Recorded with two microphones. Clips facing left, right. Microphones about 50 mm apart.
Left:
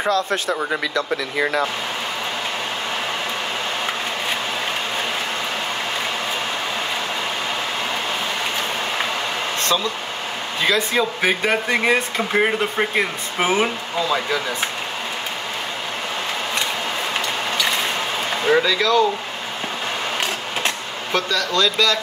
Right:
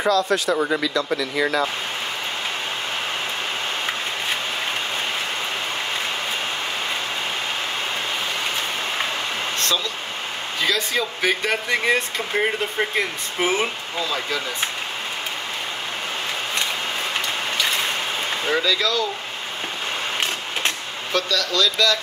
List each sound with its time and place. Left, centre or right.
0.1 s speech: left
10.7 s speech: left
18.4 s speech: left
20.6 s speech: left